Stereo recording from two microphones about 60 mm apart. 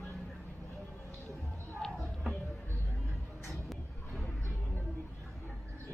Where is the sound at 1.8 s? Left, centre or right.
Centre.